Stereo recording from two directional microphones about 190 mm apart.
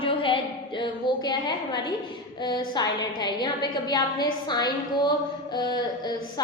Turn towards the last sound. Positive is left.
turn(degrees=20)  # may be behind; listen again after turning